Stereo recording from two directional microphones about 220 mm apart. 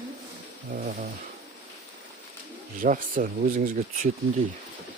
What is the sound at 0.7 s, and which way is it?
Speech, 35° right (ahead or behind).